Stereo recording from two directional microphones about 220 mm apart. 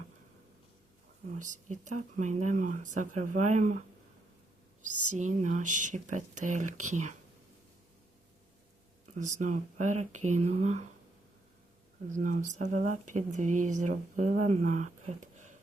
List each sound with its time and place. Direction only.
1.4 s speech: 35° right (ahead or behind)
5.1 s speech: 35° right (ahead or behind)
9.1 s speech: 35° right (ahead or behind)
12.1 s speech: 35° right (ahead or behind)